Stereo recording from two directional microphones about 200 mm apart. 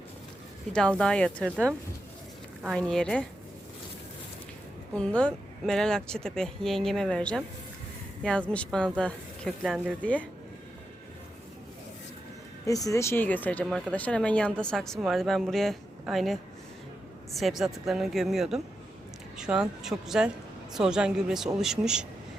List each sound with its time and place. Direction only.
0.7 s speech: 5° left (ahead or behind)
2.6 s speech: 5° left (ahead or behind)
4.9 s speech: 5° left (ahead or behind)
12.6 s speech: 15° left (ahead or behind); by 22.0 s 5° right (ahead or behind)